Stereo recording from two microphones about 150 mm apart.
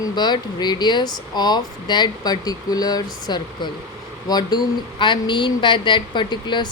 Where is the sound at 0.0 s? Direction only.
30° left (ahead or behind).